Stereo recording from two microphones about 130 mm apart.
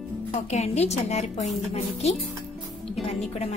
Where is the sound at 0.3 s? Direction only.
60° left (ahead or behind).